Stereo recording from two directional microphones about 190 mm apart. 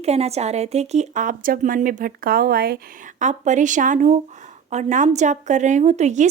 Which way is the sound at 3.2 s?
40° right (ahead or behind).